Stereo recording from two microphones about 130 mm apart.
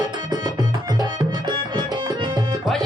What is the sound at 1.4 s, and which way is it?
Music, 35° right (ahead or behind).